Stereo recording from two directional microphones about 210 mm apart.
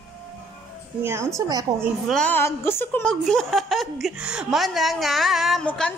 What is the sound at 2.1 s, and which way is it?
A woman's voice, 5° left (ahead or behind).